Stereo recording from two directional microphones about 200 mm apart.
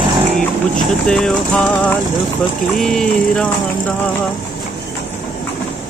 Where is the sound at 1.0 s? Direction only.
5° left (ahead or behind).